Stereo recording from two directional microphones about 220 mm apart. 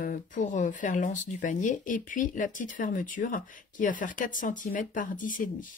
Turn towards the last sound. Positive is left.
turn(degrees=35)  # may be behind; listen again after turning